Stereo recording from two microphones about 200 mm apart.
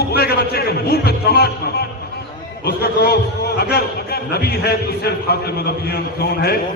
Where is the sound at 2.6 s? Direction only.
50° left (ahead or behind).